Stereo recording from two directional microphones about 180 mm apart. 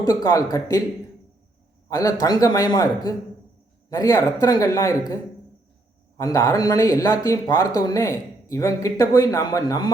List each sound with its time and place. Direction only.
0.2 s speech: 20° left (ahead or behind)
1.9 s a man's voice: 20° left (ahead or behind)